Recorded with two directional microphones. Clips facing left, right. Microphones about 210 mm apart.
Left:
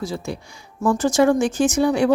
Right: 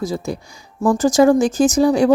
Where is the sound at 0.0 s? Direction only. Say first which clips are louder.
Right 4 dB; 40° right (ahead or behind).